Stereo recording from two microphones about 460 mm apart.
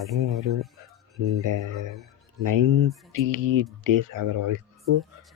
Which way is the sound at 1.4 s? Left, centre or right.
Right.